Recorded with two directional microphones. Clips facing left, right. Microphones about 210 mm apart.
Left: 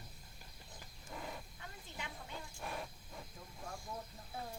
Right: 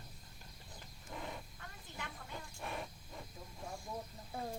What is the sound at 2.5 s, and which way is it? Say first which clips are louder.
Wild animals: right 1 dB; centre (ahead or behind).